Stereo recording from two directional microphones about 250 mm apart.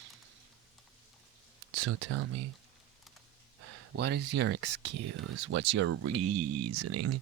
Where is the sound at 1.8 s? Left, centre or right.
Right.